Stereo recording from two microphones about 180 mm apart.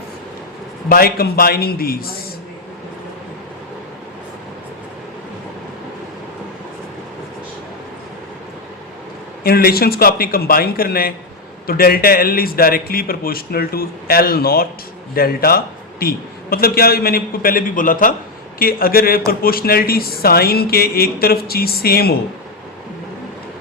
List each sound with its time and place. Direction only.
0.9 s a man's voice: 55° left (ahead or behind)
9.4 s a man's voice: 55° left (ahead or behind)